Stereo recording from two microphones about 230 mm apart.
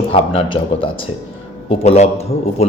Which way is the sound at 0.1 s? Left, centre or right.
Left.